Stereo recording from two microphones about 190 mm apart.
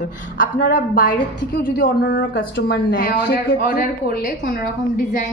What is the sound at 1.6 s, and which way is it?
Speech, 70° left (ahead or behind).